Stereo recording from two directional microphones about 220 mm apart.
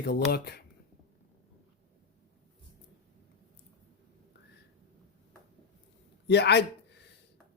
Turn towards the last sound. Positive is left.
turn(degrees=50)  # may be behind; listen again after turning